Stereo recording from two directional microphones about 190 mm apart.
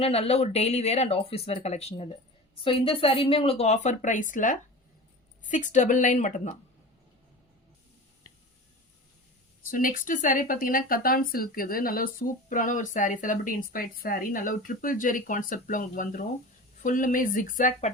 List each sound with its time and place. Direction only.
0.0 s speech: 35° left (ahead or behind)
9.6 s speech: 45° left (ahead or behind)